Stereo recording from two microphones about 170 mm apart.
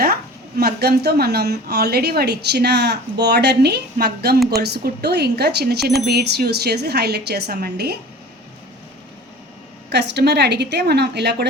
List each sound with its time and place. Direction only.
0.6 s a woman's voice: 70° right (ahead or behind)
9.9 s a woman's voice: 85° right